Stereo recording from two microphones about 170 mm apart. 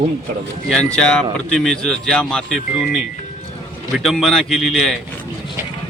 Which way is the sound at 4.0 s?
Centre (ahead or behind).